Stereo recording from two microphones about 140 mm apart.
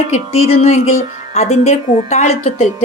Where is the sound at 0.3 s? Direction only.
45° left (ahead or behind).